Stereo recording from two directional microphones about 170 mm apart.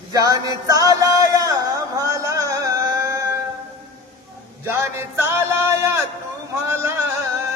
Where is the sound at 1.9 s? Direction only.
20° right (ahead or behind).